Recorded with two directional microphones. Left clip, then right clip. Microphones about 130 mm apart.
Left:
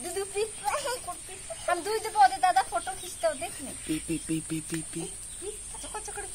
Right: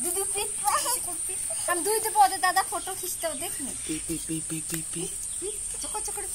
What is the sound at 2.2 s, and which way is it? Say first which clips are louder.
Speech: even; 20° left (ahead or behind).